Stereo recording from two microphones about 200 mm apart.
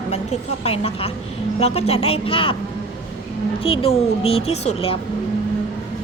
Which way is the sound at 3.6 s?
30° left (ahead or behind).